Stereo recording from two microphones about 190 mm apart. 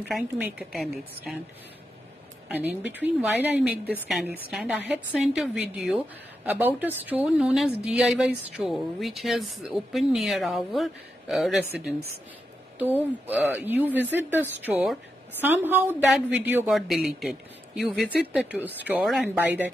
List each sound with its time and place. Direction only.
0.1 s a woman's voice: 5° right (ahead or behind)
2.4 s a woman's voice: 10° right (ahead or behind)
13.5 s speech: 10° right (ahead or behind)